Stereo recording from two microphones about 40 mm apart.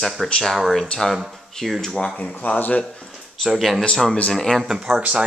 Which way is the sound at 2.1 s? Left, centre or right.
Left.